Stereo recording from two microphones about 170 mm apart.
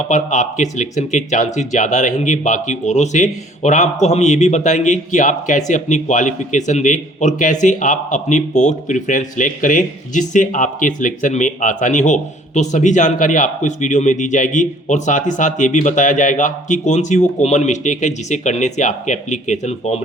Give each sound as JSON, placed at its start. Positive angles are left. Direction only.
{"t": 0.1, "sound": "speech", "side_deg": 45}